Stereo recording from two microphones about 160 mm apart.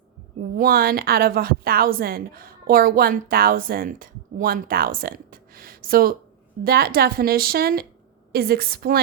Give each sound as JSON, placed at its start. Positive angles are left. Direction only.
{"t": 0.5, "sound": "a woman's voice", "side_deg": -65}